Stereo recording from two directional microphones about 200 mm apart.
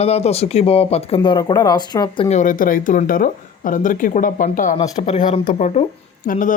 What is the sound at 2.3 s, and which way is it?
Speech, 40° left (ahead or behind).